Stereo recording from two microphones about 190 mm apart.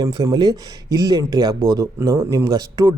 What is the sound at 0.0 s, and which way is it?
A man's voice, 20° right (ahead or behind).